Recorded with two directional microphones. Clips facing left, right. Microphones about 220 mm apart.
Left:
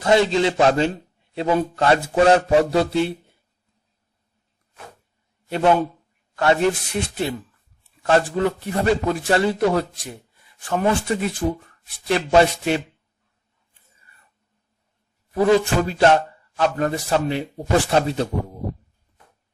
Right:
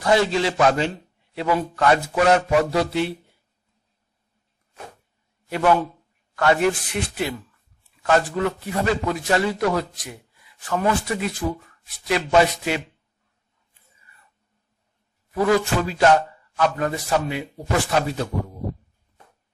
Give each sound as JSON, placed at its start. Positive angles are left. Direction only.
{"t": 0.0, "sound": "a man's voice", "side_deg": 25}
{"t": 5.5, "sound": "a man's voice", "side_deg": 25}
{"t": 15.3, "sound": "a man's voice", "side_deg": 25}